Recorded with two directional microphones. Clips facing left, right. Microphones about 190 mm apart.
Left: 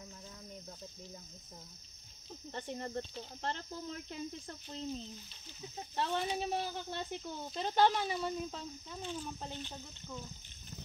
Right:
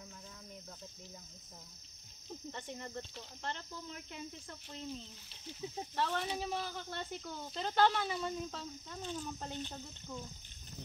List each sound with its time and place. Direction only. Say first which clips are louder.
2.5 s speech: left 7 dB; 35° left (ahead or behind); by 9.6 s 5° left (ahead or behind)